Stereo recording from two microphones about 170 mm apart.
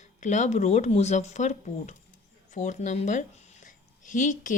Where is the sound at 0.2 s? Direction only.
45° left (ahead or behind).